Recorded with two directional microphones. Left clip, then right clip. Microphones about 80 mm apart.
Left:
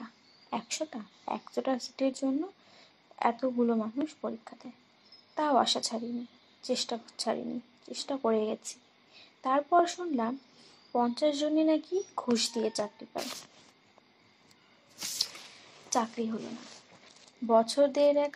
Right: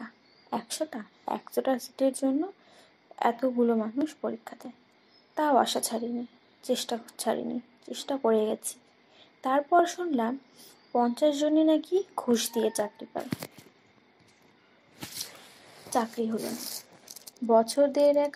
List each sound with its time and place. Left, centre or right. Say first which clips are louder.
0.0 s a sound: right 3 dB; right
2.0 s speech: right 4 dB; right
7.3 s speech: right 4 dB; right
7.8 s speech: right 3 dB; right
8.2 s speech: right 4 dB; right
11.1 s speech: right 5 dB; right
11.8 s speech: right 4 dB; right
12.9 s speech: right 2 dB; right
15.0 s a sound: left 6 dB; right
15.9 s speech: right 2 dB; right
17.5 s speech: right 2 dB; right